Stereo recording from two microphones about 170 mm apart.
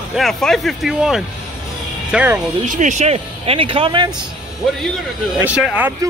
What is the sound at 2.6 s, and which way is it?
Speech, 45° right (ahead or behind).